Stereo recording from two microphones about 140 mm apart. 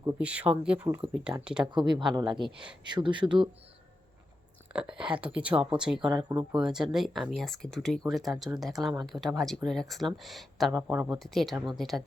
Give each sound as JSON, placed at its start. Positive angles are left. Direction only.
{"t": 0.2, "sound": "speech", "side_deg": -10}
{"t": 1.7, "sound": "speech", "side_deg": -35}
{"t": 4.7, "sound": "speech", "side_deg": -5}
{"t": 6.0, "sound": "speech", "side_deg": -30}
{"t": 6.6, "sound": "speech", "side_deg": -5}
{"t": 10.7, "sound": "speech", "side_deg": -10}
{"t": 11.2, "sound": "speech", "side_deg": 0}